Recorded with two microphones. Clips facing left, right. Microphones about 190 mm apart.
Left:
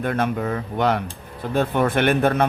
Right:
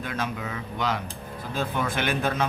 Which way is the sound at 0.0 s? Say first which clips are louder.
Left 8 dB; 55° left (ahead or behind).